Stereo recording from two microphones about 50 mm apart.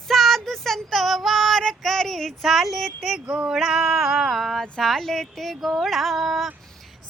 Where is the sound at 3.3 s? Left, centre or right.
Right.